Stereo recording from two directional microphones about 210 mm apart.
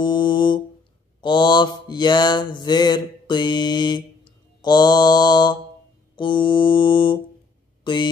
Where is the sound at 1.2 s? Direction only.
20° left (ahead or behind).